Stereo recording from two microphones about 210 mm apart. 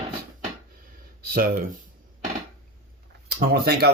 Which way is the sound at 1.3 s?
45° right (ahead or behind).